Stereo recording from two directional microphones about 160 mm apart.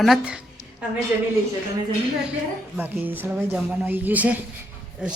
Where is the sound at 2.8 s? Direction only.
10° right (ahead or behind).